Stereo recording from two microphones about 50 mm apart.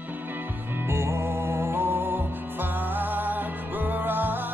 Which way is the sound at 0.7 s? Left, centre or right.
Right.